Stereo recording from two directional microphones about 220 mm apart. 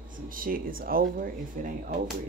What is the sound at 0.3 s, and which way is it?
Speech, 40° right (ahead or behind).